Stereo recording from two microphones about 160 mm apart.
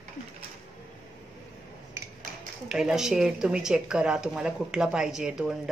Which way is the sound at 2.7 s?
5° right (ahead or behind).